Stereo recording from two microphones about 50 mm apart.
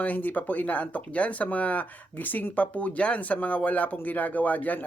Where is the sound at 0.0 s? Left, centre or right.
Left.